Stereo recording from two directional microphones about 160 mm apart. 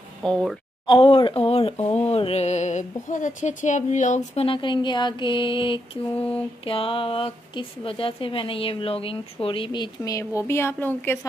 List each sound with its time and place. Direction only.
0.2 s speech: 5° left (ahead or behind)
0.8 s speech: 35° left (ahead or behind)
4.5 s speech: 30° left (ahead or behind); by 11.1 s 10° left (ahead or behind)